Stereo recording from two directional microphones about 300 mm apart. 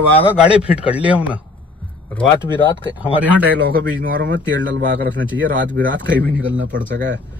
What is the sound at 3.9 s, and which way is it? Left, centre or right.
Speech, right.